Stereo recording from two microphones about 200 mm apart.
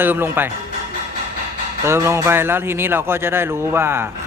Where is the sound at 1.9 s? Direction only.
15° right (ahead or behind).